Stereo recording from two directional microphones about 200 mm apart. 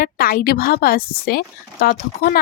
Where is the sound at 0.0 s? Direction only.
45° left (ahead or behind).